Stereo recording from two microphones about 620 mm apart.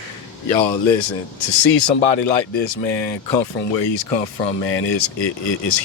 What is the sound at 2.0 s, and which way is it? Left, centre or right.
Speech, left.